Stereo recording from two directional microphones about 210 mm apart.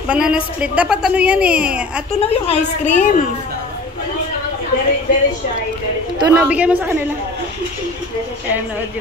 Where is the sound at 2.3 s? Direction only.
30° left (ahead or behind).